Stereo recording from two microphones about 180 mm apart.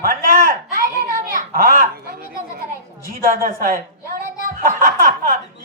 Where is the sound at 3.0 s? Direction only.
50° right (ahead or behind).